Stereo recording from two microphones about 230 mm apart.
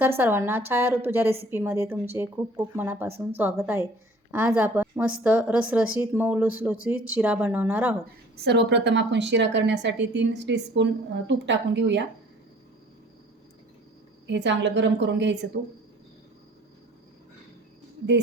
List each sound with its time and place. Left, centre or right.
0.0 s a woman's voice: centre
8.4 s a woman's voice: right
14.3 s a woman's voice: right